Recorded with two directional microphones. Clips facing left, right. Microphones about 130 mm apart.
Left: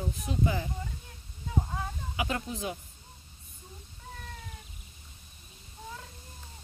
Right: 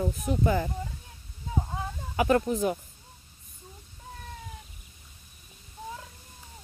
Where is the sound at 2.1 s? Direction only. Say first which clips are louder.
Right 11 dB; 50° right (ahead or behind).